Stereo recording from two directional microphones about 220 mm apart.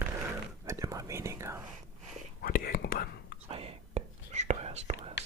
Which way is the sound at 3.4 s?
25° right (ahead or behind).